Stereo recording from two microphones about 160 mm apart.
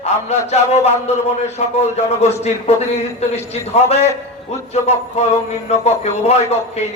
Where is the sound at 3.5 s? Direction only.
40° left (ahead or behind).